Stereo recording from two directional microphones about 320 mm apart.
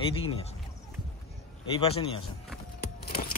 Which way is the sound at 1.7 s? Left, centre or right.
Centre.